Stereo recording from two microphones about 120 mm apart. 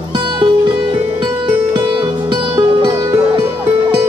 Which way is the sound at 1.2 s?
40° right (ahead or behind).